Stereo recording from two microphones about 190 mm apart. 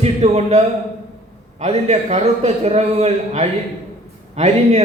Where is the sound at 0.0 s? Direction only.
35° right (ahead or behind).